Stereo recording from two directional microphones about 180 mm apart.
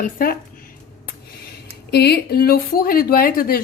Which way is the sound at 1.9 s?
65° left (ahead or behind).